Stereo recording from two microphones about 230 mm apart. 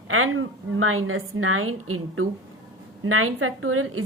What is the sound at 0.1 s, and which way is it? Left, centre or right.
Speech, right.